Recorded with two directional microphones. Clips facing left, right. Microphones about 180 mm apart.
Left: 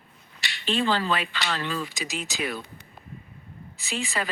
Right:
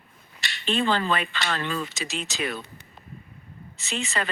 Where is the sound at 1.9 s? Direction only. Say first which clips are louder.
Even; centre (ahead or behind).